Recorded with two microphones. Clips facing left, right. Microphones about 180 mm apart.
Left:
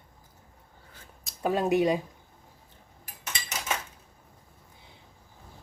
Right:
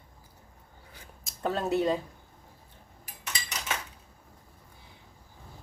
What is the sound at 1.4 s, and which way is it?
Speech, 15° left (ahead or behind).